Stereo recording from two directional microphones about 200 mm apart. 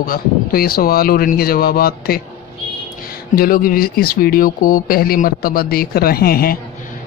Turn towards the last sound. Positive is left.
turn(degrees=50)  # may be behind; listen again after turning